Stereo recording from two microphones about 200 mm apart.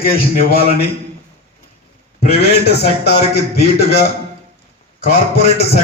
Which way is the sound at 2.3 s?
55° left (ahead or behind).